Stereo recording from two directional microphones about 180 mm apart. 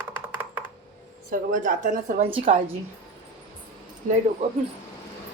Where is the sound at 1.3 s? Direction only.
50° right (ahead or behind).